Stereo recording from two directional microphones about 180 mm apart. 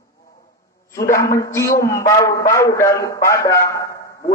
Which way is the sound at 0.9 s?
15° left (ahead or behind).